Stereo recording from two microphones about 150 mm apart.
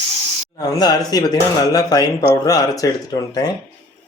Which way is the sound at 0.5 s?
25° left (ahead or behind).